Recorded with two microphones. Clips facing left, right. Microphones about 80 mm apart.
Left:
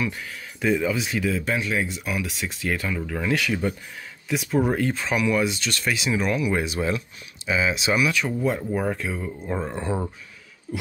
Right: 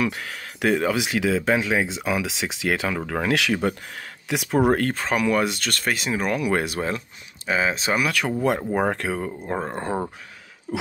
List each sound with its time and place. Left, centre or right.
0.0 s speech: right
7.4 s speech: right
8.4 s speech: right
9.5 s speech: right